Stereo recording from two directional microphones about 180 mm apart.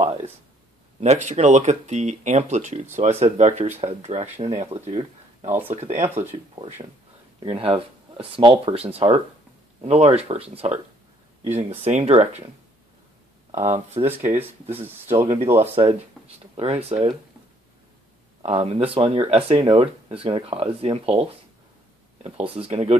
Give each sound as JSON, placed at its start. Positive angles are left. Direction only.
{"t": 0.0, "sound": "a sound", "side_deg": -35}
{"t": 1.0, "sound": "speech", "side_deg": -40}
{"t": 5.9, "sound": "speech", "side_deg": -10}
{"t": 6.2, "sound": "speech", "side_deg": -30}
{"t": 11.8, "sound": "speech", "side_deg": -35}
{"t": 13.5, "sound": "speech", "side_deg": -40}
{"t": 14.0, "sound": "speech", "side_deg": -10}
{"t": 15.7, "sound": "speech", "side_deg": -30}
{"t": 18.4, "sound": "speech", "side_deg": -35}